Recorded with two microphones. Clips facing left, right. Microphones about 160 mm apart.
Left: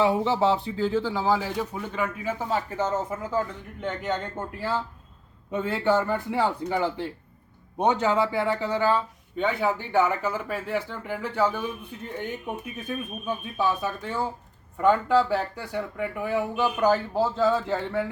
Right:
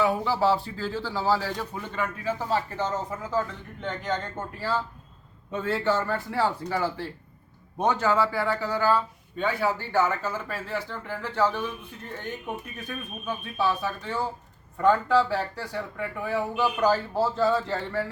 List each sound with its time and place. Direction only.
0.0 s speech: 25° left (ahead or behind)
5.6 s speech: 15° left (ahead or behind)
12.9 s speech: 15° left (ahead or behind)